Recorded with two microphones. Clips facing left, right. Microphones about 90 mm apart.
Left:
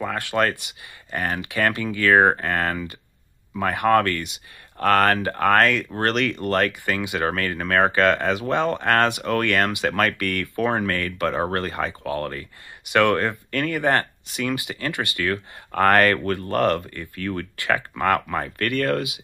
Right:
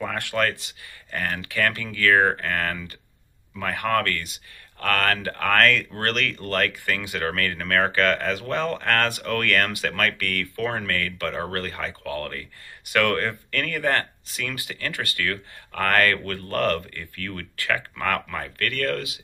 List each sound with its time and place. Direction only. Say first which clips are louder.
0.0 s speech: left 2 dB; 5° left (ahead or behind)
1.1 s speech: left 2 dB; 20° left (ahead or behind)
9.9 s speech: left 3 dB; 30° left (ahead or behind)